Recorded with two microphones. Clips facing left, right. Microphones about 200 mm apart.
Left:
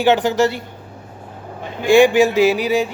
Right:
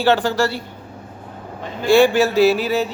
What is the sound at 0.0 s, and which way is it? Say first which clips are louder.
Speech: left 2 dB; 20° left (ahead or behind).